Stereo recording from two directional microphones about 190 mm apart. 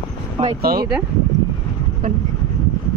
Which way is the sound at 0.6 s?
55° right (ahead or behind).